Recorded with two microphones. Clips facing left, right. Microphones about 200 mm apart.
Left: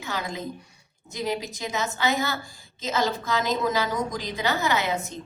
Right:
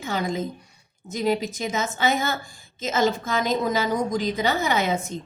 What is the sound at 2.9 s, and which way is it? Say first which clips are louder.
A woman's voice: right 3 dB; 50° right (ahead or behind).